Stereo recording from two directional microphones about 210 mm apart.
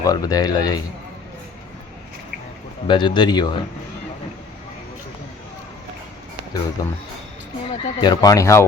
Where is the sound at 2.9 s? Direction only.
20° left (ahead or behind).